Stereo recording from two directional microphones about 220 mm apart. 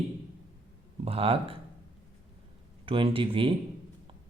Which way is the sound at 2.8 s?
25° right (ahead or behind).